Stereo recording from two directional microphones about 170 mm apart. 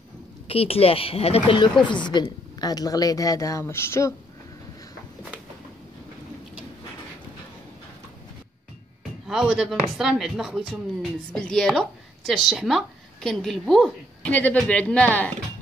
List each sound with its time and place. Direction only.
0.5 s speech: 35° left (ahead or behind); by 4.1 s 15° left (ahead or behind)
9.3 s speech: 5° right (ahead or behind)